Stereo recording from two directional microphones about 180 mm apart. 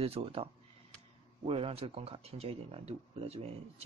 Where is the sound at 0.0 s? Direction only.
35° right (ahead or behind).